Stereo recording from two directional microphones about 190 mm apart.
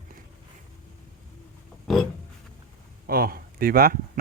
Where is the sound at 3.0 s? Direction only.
50° right (ahead or behind).